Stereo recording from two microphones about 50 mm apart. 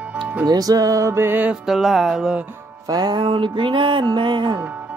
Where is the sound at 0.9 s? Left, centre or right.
Right.